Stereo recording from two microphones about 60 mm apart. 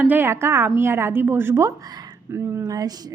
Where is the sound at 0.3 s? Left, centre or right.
Right.